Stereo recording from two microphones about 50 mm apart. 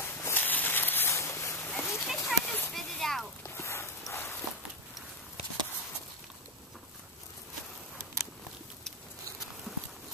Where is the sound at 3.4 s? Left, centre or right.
Left.